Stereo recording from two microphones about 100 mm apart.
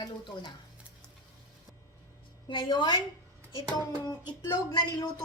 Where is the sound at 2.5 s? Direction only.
50° left (ahead or behind).